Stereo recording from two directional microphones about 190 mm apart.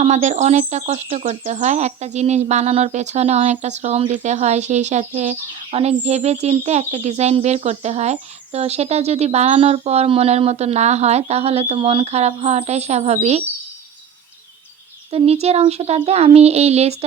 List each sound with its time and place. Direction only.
0.0 s speech: 35° right (ahead or behind)
15.1 s speech: 35° right (ahead or behind)